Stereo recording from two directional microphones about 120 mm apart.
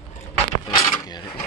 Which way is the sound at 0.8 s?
35° left (ahead or behind).